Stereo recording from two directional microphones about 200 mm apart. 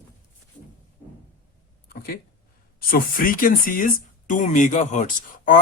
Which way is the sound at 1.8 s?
50° left (ahead or behind).